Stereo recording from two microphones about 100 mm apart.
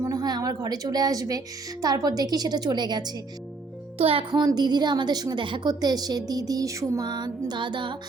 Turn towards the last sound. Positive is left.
turn(degrees=-55)  # may be behind; listen again after turning